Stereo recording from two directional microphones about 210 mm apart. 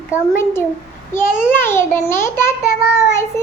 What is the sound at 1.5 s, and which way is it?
Child singing, 10° left (ahead or behind).